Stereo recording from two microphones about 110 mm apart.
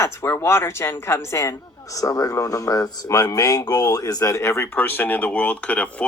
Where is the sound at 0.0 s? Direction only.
25° left (ahead or behind).